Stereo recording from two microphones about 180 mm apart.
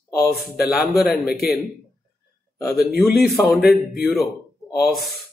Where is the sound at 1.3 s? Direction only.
60° left (ahead or behind).